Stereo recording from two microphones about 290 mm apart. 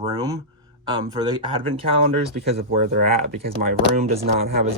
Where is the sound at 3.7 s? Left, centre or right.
Right.